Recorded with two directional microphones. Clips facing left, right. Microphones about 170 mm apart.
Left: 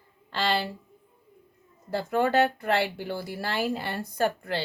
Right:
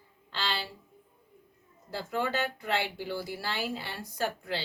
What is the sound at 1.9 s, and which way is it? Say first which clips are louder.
Speech: left 8 dB; 55° left (ahead or behind).